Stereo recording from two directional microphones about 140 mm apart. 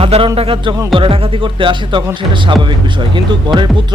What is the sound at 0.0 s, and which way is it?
Speech, 40° right (ahead or behind).